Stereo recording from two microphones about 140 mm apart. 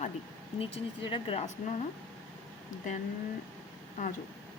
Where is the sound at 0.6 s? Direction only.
40° left (ahead or behind).